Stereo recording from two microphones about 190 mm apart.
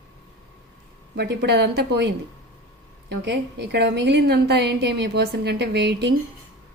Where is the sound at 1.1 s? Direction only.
60° right (ahead or behind).